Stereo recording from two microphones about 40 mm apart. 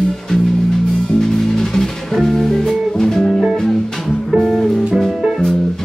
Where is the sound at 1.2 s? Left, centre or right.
Centre.